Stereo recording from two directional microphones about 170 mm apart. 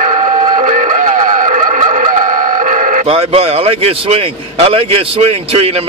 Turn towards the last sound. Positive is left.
turn(degrees=-35)  # may be behind; listen again after turning